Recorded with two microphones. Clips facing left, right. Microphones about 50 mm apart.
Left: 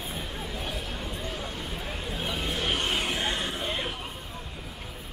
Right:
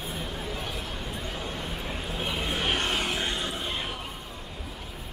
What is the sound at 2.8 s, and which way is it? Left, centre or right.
Vehicle, centre.